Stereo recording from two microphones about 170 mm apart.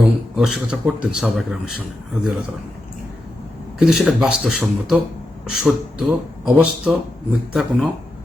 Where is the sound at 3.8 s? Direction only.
5° right (ahead or behind).